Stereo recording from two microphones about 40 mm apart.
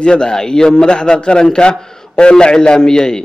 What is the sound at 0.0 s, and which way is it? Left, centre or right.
A man's voice, left.